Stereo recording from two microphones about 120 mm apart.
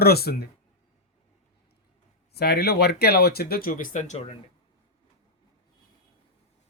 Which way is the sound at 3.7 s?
85° left.